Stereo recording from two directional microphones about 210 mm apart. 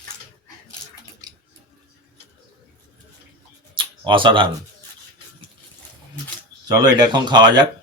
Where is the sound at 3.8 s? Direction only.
25° right (ahead or behind).